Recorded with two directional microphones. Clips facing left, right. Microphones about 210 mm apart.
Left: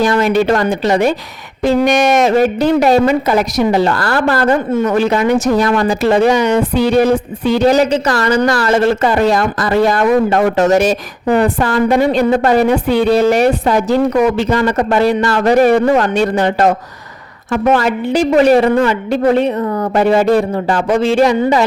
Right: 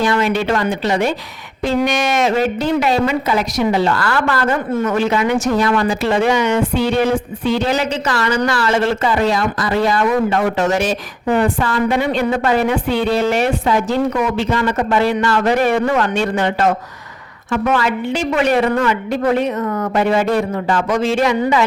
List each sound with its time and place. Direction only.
0.0 s a woman's voice: 40° left (ahead or behind)